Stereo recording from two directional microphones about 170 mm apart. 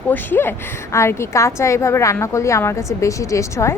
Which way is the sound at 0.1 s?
10° left (ahead or behind).